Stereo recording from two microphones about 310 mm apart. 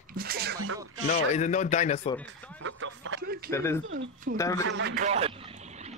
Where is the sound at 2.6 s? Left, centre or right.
Right.